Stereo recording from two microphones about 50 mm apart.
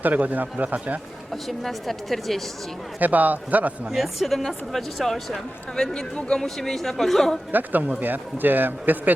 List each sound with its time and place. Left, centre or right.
0.0 s speech: right
1.3 s speech: centre
3.0 s speech: right
3.8 s speech: centre
6.1 s speech: left
6.4 s speech: centre
7.5 s speech: right